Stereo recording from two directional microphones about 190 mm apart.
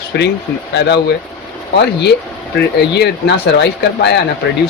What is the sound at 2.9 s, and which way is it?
Speech, 60° left (ahead or behind).